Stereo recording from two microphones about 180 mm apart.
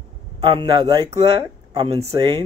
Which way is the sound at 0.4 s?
25° right (ahead or behind).